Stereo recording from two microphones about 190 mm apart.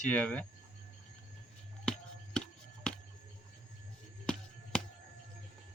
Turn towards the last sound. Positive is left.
turn(degrees=5)  # may be behind; listen again after turning